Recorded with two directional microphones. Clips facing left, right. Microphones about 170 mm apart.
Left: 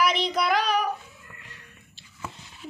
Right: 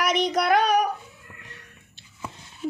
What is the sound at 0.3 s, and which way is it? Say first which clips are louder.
Child singing: right 4 dB; 55° right (ahead or behind).